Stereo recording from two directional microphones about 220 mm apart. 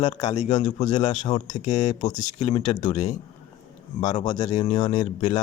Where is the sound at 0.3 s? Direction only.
35° left (ahead or behind).